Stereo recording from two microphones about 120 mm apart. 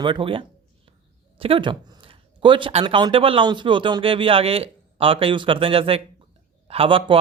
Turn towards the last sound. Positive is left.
turn(degrees=-45)  # may be behind; listen again after turning